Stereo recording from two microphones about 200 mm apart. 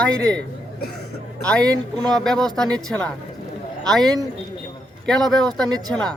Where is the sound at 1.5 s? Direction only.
5° left (ahead or behind).